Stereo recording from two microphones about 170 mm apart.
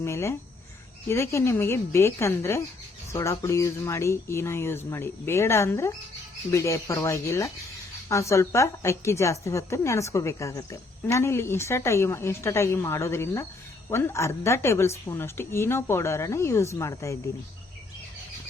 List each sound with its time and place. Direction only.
0.0 s a woman's voice: 15° left (ahead or behind)